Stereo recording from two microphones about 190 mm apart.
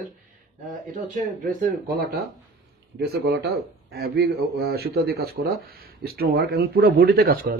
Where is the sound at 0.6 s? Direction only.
45° right (ahead or behind).